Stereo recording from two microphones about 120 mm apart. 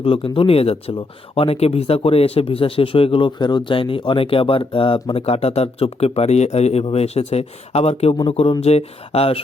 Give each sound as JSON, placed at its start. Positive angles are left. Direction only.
{"t": 0.0, "sound": "a man's voice", "side_deg": 50}